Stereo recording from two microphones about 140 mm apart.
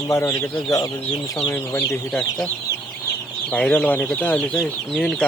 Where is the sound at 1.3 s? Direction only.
10° left (ahead or behind).